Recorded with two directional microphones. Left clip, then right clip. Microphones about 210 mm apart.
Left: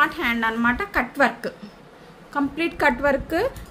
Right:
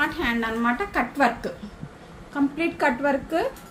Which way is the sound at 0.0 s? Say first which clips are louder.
Left 4 dB; 45° left (ahead or behind).